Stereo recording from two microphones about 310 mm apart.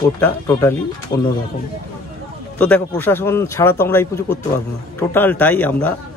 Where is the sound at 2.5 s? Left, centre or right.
Centre.